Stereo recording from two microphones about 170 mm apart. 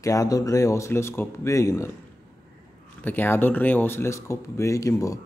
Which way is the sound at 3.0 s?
10° left (ahead or behind).